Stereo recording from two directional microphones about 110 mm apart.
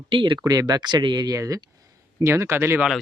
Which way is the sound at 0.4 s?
35° right (ahead or behind).